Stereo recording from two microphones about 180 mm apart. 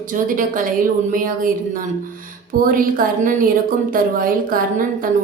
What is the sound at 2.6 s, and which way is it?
A woman's voice, 50° right (ahead or behind).